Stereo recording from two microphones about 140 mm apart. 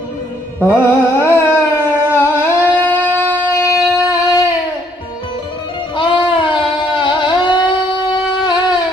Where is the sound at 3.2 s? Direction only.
15° left (ahead or behind).